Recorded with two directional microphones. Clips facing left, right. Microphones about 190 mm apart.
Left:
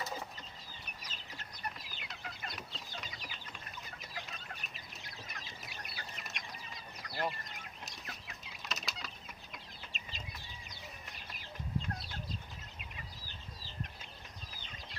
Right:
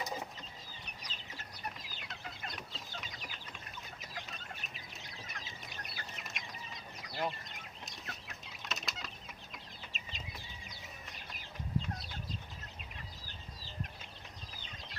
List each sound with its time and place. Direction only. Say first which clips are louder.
1.0 s chicken: right 1 dB; centre (ahead or behind)